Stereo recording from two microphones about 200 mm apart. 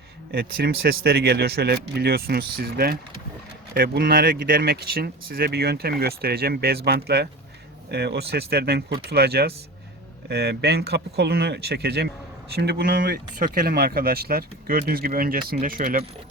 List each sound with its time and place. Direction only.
0.3 s speech: 50° right (ahead or behind)